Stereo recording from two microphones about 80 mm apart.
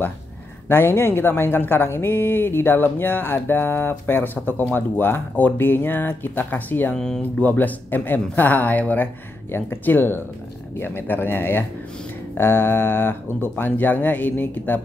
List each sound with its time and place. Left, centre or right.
0.7 s speech: left
7.0 s speech: centre